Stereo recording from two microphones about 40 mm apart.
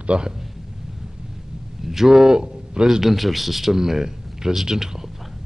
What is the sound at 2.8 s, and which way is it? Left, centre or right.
A man's voice, centre.